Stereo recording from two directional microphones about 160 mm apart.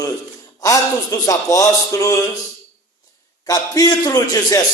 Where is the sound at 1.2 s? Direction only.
20° left (ahead or behind).